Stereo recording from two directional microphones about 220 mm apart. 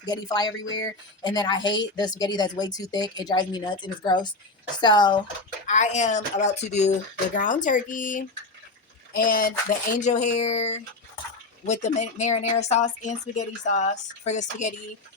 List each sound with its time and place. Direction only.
0.0 s speech: 20° left (ahead or behind)
5.6 s speech: 35° left (ahead or behind)